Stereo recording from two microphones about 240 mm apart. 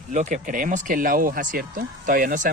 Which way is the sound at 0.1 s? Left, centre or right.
Right.